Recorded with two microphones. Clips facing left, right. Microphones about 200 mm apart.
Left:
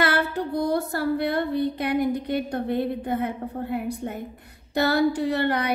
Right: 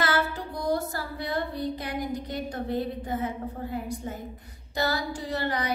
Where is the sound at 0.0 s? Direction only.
60° left (ahead or behind).